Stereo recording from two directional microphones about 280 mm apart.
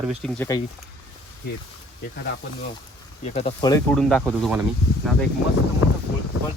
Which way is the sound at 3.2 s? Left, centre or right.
Left.